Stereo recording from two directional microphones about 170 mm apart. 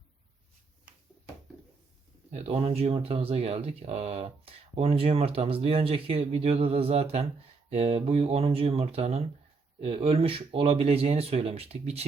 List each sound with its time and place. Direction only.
2.3 s speech: 40° right (ahead or behind)